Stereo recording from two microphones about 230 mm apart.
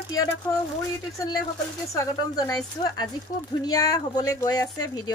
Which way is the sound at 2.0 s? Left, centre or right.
Centre.